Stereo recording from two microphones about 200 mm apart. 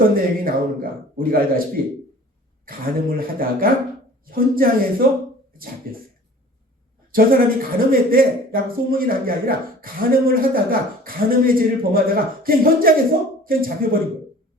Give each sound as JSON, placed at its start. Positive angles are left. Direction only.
{"t": 0.2, "sound": "speech", "side_deg": -45}
{"t": 7.1, "sound": "speech", "side_deg": -45}